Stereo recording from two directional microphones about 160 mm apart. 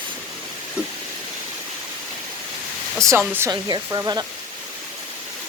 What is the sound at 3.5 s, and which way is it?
Speech, 25° right (ahead or behind).